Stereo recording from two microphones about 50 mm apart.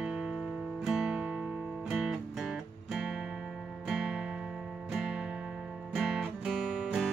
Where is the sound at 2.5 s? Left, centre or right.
Centre.